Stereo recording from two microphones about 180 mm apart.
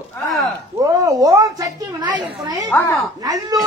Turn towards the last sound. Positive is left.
turn(degrees=-20)  # may be behind; listen again after turning